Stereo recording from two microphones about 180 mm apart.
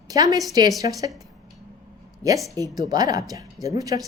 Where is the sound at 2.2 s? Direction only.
10° left (ahead or behind).